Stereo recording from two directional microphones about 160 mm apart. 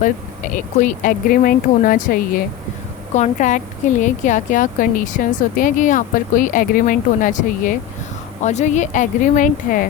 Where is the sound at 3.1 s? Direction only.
50° left (ahead or behind).